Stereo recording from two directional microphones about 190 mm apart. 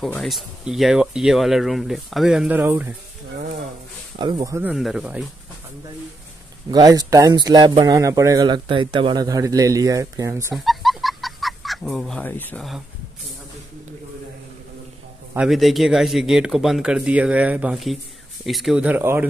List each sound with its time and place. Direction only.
0.0 s speech: centre (ahead or behind)
4.2 s speech: 20° right (ahead or behind)
4.7 s speech: centre (ahead or behind)
6.7 s speech: 20° right (ahead or behind)
10.5 s goose: centre (ahead or behind)
15.3 s speech: centre (ahead or behind)